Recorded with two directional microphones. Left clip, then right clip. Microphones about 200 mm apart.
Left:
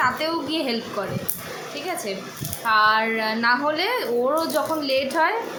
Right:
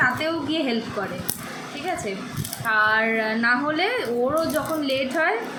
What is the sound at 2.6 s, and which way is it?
A woman's voice, 20° left (ahead or behind).